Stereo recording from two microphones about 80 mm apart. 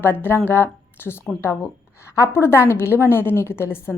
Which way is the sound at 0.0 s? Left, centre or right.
Left.